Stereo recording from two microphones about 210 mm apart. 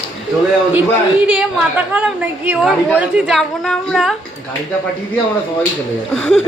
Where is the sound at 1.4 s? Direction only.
5° right (ahead or behind).